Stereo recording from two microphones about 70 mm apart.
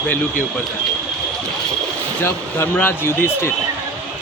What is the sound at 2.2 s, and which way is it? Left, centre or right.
Speech, left.